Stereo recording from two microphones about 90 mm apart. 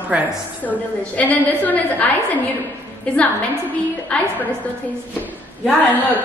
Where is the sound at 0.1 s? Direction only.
15° right (ahead or behind).